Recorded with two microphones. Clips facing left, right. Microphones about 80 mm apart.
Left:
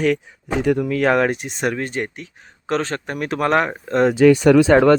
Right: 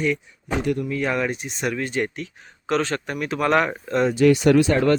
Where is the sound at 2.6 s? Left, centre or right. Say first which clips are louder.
Left 1 dB; left.